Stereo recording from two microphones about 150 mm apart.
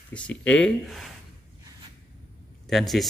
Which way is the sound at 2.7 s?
Centre (ahead or behind).